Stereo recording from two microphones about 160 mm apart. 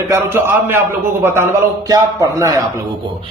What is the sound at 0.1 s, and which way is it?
A man's voice, 15° right (ahead or behind).